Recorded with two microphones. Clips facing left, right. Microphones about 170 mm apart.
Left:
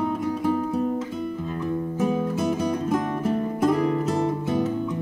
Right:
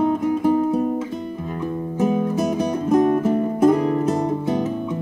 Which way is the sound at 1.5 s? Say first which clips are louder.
Right 3 dB; 25° right (ahead or behind).